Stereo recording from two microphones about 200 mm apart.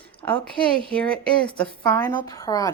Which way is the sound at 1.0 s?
5° left (ahead or behind).